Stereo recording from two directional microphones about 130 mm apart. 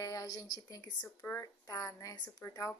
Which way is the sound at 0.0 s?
25° left (ahead or behind).